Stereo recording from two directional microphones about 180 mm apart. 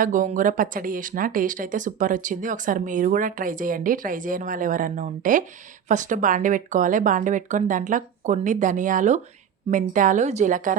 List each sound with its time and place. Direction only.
0.0 s speech: 45° right (ahead or behind)